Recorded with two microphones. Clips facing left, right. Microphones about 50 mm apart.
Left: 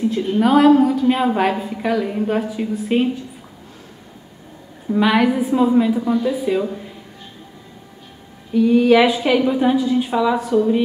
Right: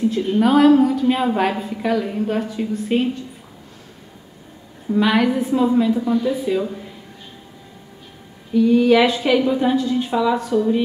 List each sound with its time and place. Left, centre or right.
0.0 s a woman's voice: centre
4.8 s a woman's voice: centre
8.5 s a woman's voice: centre